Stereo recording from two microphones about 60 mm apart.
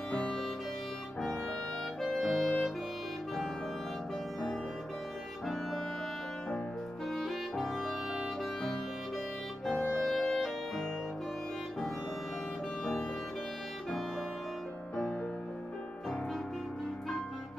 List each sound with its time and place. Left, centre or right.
0.1 s music: centre
2.0 s clarinet: centre
7.2 s music: centre